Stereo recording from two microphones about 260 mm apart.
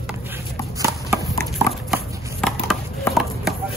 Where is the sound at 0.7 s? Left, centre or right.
Centre.